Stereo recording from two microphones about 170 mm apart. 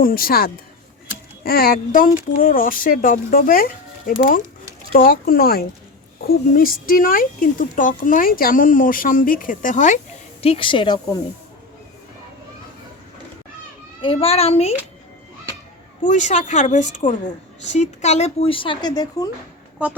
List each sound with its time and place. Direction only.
0.0 s speech: 60° left (ahead or behind)
10.4 s speech: 30° left (ahead or behind)
14.0 s speech: 35° left (ahead or behind)
16.0 s speech: 45° left (ahead or behind); by 19.3 s 20° left (ahead or behind)